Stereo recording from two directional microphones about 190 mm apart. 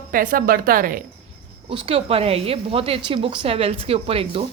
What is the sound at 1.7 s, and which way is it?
A woman's voice, 30° right (ahead or behind).